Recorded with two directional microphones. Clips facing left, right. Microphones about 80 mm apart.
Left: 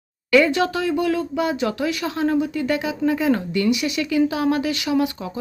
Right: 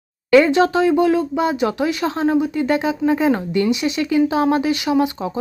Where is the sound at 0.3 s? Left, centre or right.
Right.